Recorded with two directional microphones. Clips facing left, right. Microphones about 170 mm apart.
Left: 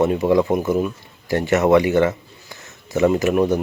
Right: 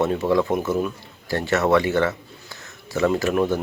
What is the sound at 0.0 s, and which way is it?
Speech, 15° left (ahead or behind).